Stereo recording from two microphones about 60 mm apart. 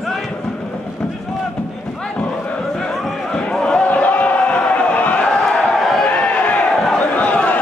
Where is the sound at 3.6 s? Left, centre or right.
Centre.